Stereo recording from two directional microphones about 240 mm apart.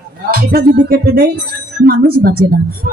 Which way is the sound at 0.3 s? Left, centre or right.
Right.